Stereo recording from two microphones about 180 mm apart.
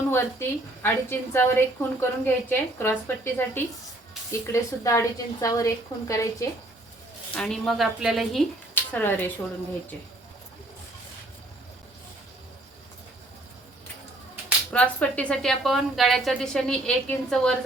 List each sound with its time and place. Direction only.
0.1 s a woman's voice: 10° left (ahead or behind)
7.3 s a woman's voice: 5° left (ahead or behind)
14.7 s a woman's voice: 10° left (ahead or behind)